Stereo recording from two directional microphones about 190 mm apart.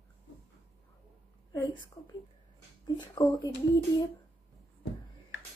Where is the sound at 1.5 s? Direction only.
20° left (ahead or behind).